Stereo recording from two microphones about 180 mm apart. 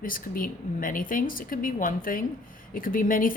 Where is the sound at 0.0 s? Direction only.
50° left (ahead or behind).